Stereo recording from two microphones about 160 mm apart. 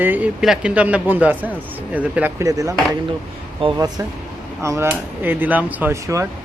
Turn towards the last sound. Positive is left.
turn(degrees=-20)  # may be behind; listen again after turning